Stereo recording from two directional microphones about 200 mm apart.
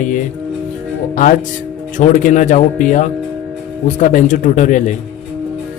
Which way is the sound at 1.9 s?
40° left (ahead or behind).